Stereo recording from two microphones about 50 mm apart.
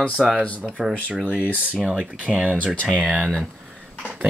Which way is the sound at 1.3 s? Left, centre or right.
Centre.